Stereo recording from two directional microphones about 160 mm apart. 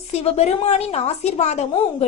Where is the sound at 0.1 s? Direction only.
40° left (ahead or behind).